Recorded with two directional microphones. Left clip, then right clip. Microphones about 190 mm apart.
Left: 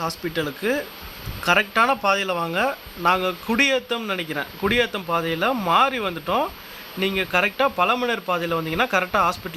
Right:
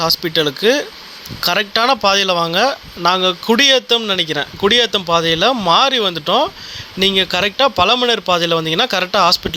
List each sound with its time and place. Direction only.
0.0 s speech: 30° right (ahead or behind)